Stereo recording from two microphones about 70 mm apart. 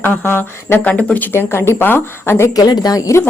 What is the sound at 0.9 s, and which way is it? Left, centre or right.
Speech, centre.